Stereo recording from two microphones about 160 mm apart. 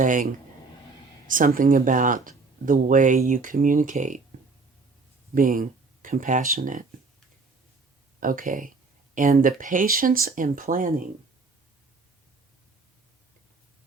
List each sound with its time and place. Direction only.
0.0 s speech: 55° right (ahead or behind)
1.3 s speech: 60° right (ahead or behind)
5.3 s speech: 60° right (ahead or behind)
8.2 s speech: 60° right (ahead or behind)